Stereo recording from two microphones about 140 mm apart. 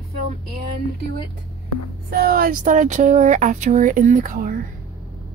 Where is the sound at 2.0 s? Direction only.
90° right; by 4.5 s 70° right (ahead or behind).